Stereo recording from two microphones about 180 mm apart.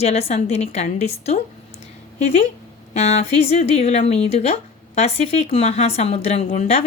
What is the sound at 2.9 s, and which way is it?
Speech, 35° left (ahead or behind).